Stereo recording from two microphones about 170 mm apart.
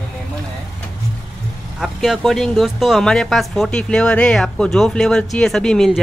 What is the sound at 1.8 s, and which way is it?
Speech, centre (ahead or behind).